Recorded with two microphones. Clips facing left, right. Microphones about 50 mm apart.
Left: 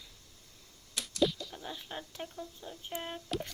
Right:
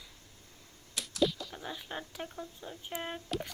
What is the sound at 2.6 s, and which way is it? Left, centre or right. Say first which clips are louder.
Speech: right 1 dB; centre.